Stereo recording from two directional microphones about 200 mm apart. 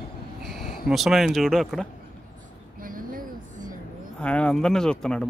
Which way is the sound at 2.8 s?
45° right (ahead or behind).